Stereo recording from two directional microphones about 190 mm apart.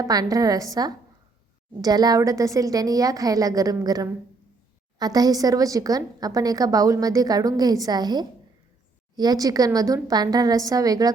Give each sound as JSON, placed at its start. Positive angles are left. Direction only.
{"t": 0.0, "sound": "a woman's voice", "side_deg": -20}